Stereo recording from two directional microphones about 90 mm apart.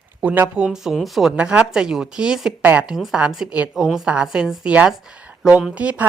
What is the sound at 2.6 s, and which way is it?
Speech, 20° right (ahead or behind).